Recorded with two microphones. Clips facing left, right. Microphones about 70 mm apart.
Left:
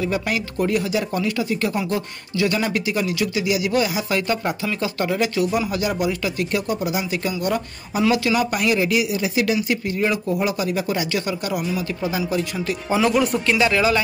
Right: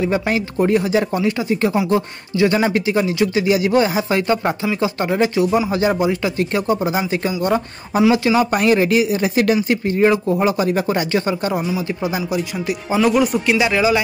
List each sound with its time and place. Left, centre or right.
0.0 s speech: right
11.6 s speech: right
12.2 s speech: centre